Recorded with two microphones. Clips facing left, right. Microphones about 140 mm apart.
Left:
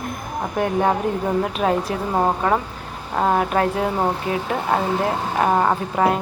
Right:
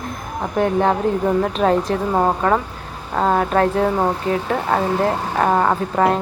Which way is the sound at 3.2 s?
10° left (ahead or behind).